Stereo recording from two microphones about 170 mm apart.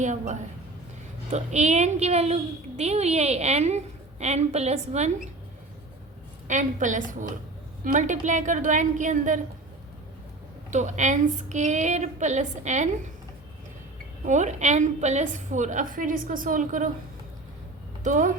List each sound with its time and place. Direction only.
0.0 s a woman's voice: 45° right (ahead or behind)
6.5 s a woman's voice: 45° right (ahead or behind)
10.7 s a woman's voice: 45° right (ahead or behind)
14.3 s a woman's voice: 45° right (ahead or behind)
18.0 s speech: 50° right (ahead or behind)